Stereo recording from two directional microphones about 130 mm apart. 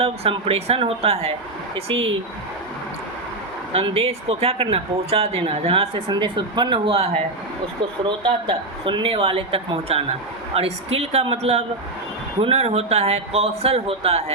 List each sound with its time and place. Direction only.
0.0 s a woman's voice: 45° right (ahead or behind)
3.7 s a woman's voice: 50° right (ahead or behind)